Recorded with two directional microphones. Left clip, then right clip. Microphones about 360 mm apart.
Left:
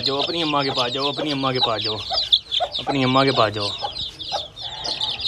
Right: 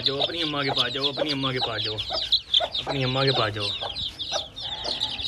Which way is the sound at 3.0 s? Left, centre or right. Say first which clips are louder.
Left 7 dB; centre.